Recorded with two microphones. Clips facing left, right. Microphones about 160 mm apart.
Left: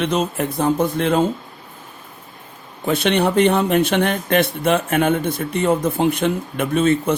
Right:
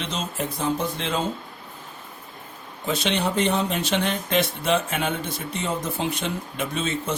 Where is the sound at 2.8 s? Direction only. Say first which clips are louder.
Left 7 dB; 60° left (ahead or behind).